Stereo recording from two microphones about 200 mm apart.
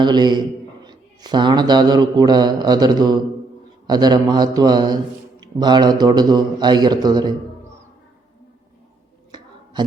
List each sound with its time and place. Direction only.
0.0 s a man's voice: 20° right (ahead or behind)